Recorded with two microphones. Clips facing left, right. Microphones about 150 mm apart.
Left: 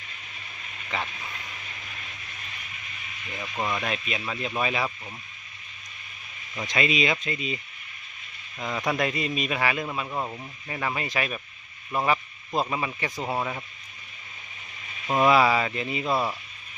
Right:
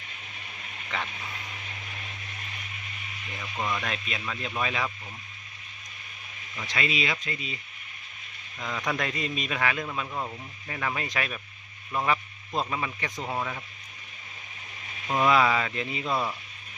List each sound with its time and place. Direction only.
0.9 s speech: 5° left (ahead or behind)
3.6 s speech: 15° left (ahead or behind)
6.6 s speech: 20° left (ahead or behind)
8.6 s speech: 15° left (ahead or behind)
15.0 s speech: 20° left (ahead or behind)
15.3 s speech: 5° left (ahead or behind)